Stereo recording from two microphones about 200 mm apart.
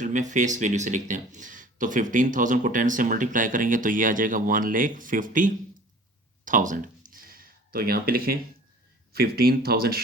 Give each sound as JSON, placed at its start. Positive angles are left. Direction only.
{"t": 0.0, "sound": "speech", "side_deg": -40}
{"t": 6.4, "sound": "a sound", "side_deg": -40}
{"t": 9.1, "sound": "speech", "side_deg": -50}